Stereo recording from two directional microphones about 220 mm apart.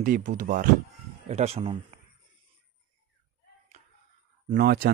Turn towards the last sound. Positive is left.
turn(degrees=-45)  # may be behind; listen again after turning